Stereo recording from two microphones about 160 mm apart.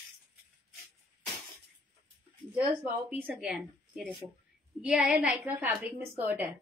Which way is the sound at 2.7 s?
10° right (ahead or behind).